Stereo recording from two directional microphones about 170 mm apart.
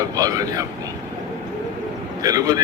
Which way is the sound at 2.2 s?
20° right (ahead or behind).